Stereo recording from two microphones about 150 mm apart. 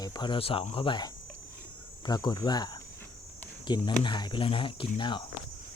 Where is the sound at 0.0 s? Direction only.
30° left (ahead or behind).